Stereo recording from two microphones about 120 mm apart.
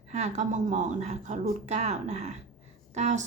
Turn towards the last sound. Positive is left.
turn(degrees=-75)  # may be behind; listen again after turning